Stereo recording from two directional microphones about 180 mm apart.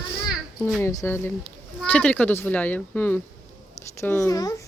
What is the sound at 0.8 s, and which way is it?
A child's voice, 15° left (ahead or behind).